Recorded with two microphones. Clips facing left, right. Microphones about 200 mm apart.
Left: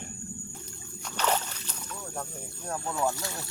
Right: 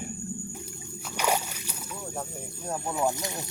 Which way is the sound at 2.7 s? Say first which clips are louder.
Right 2 dB; 15° right (ahead or behind).